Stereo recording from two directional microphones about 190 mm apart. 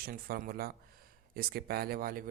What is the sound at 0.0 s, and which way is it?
Speech, 50° right (ahead or behind).